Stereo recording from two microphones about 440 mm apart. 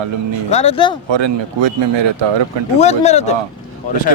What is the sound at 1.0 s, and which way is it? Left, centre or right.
Speech, right.